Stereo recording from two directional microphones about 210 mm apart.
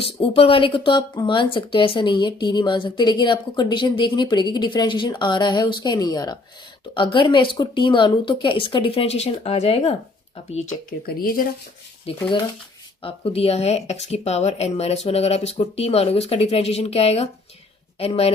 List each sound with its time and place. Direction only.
0.0 s speech: 25° left (ahead or behind)
11.0 s speech: 45° left (ahead or behind)
12.1 s speech: 25° left (ahead or behind)